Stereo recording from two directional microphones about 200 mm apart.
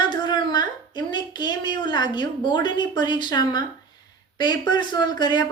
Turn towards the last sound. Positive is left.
turn(degrees=20)  # may be behind; listen again after turning